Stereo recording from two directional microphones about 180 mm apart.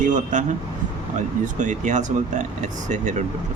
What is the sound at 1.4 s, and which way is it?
Speech, 45° right (ahead or behind).